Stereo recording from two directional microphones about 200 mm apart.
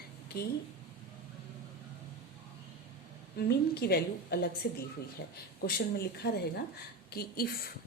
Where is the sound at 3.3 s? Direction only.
55° left (ahead or behind).